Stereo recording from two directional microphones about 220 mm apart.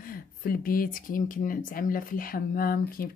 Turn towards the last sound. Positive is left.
turn(degrees=40)  # may be behind; listen again after turning